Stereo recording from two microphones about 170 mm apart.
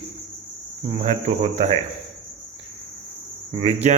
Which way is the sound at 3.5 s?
35° right (ahead or behind).